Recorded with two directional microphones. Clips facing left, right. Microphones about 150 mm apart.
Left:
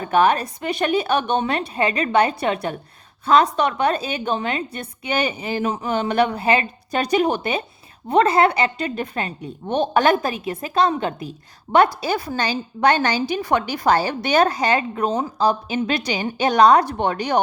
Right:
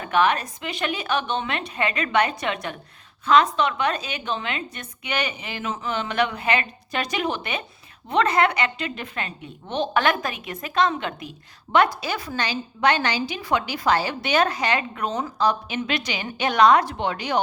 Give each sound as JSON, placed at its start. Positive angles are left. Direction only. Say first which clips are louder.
{"t": 0.0, "sound": "a woman's voice", "louder": "left 4 dB", "side_deg": 40}